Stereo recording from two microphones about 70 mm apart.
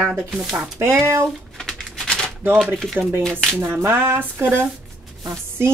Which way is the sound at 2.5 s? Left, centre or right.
Centre.